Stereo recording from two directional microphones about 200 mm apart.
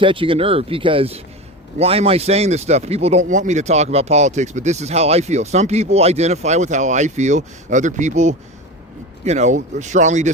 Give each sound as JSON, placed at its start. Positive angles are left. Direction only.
{"t": 0.0, "sound": "speech", "side_deg": -25}